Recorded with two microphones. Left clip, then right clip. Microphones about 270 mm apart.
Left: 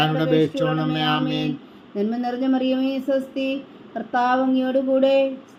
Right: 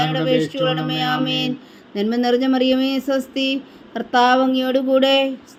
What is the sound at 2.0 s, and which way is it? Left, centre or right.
Speech, right.